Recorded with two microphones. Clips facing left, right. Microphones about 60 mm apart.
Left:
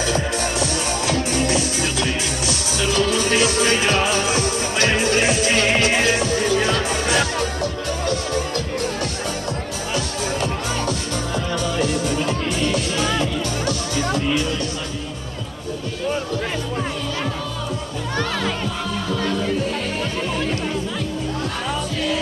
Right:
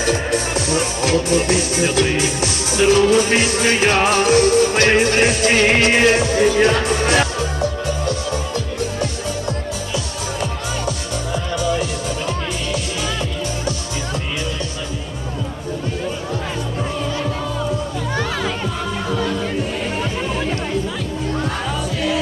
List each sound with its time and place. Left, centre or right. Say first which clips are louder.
0.7 s music: right 4 dB; right
10.4 s music: even; centre
18.2 s music: left 1 dB; centre